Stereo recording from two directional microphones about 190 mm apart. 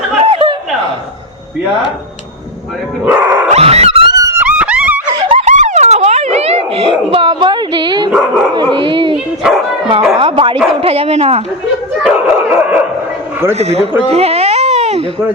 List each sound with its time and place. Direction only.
0.3 s a sound: 25° right (ahead or behind)
3.0 s dog: 10° right (ahead or behind)
3.5 s dog: 35° right (ahead or behind)
4.2 s dog: 10° right (ahead or behind)
5.4 s a sound: 40° right (ahead or behind); by 8.1 s 25° right (ahead or behind)
8.1 s speech: 5° right (ahead or behind)
8.7 s speech: 25° right (ahead or behind)
9.1 s dog: 5° right (ahead or behind)
10.2 s speech: 25° right (ahead or behind)
12.0 s a sound: 10° right (ahead or behind)
13.6 s speech: 35° right (ahead or behind)
14.1 s baby cry: 35° right (ahead or behind)